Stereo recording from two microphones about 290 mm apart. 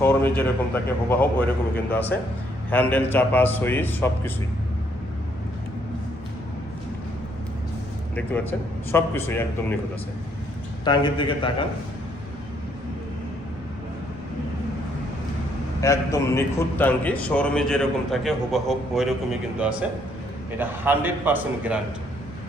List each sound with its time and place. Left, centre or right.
0.0 s a man's voice: centre
8.1 s a man's voice: centre
10.8 s a man's voice: centre
15.8 s a man's voice: centre